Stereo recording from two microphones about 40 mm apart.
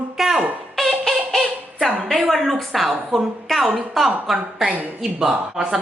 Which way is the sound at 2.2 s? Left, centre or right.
Centre.